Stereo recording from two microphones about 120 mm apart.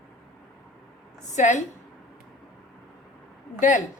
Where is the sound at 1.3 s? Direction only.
90° left.